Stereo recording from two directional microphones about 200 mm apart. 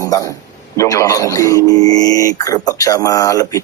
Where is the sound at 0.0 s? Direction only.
15° left (ahead or behind).